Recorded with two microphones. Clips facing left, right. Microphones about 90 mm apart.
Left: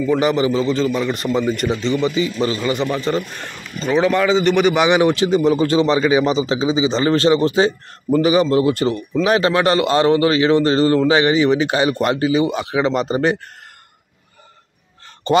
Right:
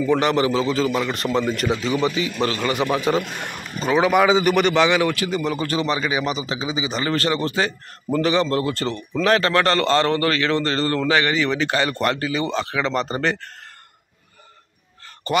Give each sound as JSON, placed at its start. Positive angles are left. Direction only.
{"t": 0.0, "sound": "a man's voice", "side_deg": 5}
{"t": 4.7, "sound": "a man's voice", "side_deg": 20}
{"t": 15.3, "sound": "a man's voice", "side_deg": 25}